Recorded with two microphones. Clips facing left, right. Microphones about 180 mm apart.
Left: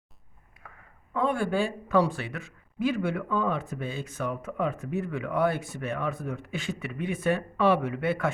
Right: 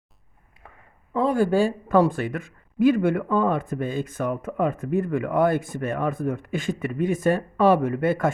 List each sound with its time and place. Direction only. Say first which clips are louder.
1.1 s speech: right 6 dB; 35° right (ahead or behind)